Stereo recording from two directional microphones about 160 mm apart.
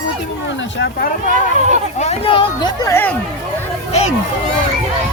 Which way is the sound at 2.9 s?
15° left (ahead or behind).